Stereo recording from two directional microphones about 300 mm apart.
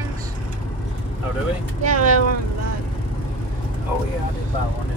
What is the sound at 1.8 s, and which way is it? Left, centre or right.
Speech, right.